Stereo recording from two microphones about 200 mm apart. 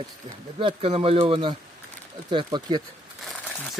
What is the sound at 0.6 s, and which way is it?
Speech, 30° right (ahead or behind).